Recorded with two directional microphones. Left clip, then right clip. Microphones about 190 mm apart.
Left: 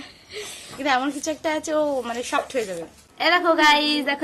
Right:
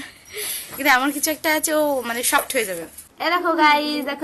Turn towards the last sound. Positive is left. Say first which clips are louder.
# even
turn(degrees=5)  # may be behind; listen again after turning